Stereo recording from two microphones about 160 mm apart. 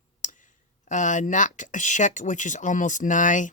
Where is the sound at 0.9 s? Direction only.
50° left (ahead or behind).